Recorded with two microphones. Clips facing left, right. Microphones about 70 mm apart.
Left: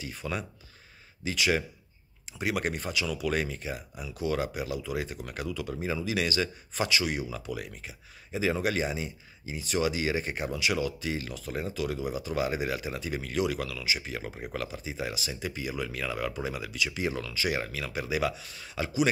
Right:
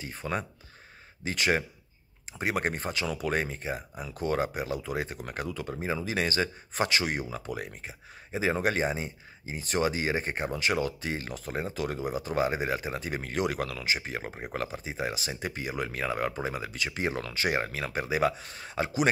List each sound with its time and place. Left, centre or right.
0.0 s speech: right